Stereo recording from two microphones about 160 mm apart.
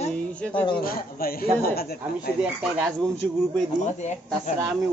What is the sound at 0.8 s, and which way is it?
A man's voice, 65° left (ahead or behind).